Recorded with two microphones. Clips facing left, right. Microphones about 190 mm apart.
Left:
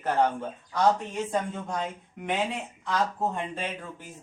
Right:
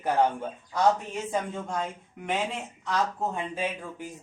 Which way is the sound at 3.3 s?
5° right (ahead or behind).